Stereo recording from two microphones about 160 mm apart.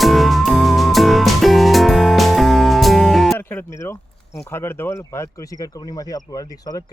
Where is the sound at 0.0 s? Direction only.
Centre (ahead or behind).